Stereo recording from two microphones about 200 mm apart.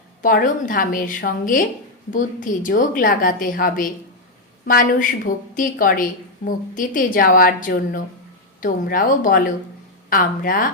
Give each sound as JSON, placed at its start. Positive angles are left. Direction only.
{"t": 0.2, "sound": "a woman's voice", "side_deg": 45}